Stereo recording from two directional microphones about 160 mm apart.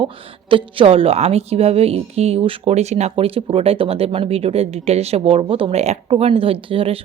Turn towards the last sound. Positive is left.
turn(degrees=-35)  # may be behind; listen again after turning